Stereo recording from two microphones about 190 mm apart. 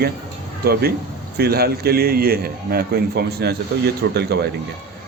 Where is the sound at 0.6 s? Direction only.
55° right (ahead or behind).